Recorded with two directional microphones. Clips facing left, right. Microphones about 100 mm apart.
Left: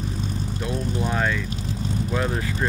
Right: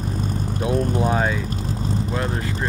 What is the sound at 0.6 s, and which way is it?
Speech, 50° right (ahead or behind).